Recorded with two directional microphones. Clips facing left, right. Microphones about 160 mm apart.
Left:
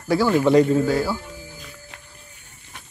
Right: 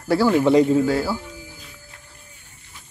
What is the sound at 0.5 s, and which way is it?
Speech, 20° right (ahead or behind).